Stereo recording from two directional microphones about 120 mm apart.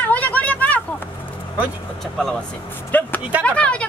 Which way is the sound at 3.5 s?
10° left (ahead or behind).